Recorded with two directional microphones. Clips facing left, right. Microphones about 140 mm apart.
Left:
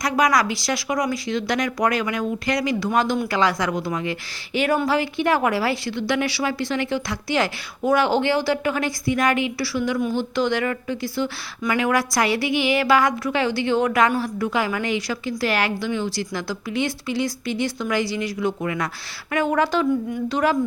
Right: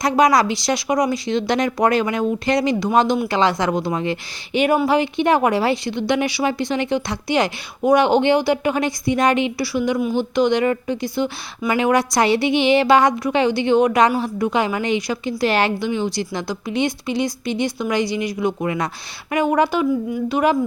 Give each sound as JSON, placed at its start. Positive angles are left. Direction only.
{"t": 0.0, "sound": "a woman's voice", "side_deg": -25}